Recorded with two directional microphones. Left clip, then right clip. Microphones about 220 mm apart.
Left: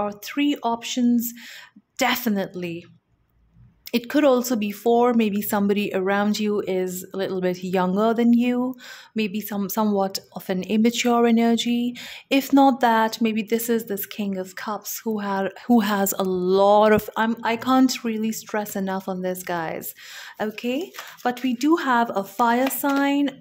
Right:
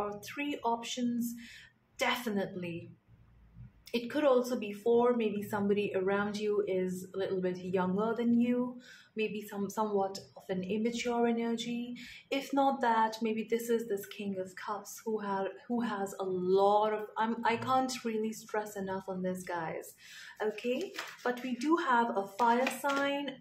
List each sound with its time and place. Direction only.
0.0 s speech: 40° left (ahead or behind)
3.9 s speech: 45° left (ahead or behind)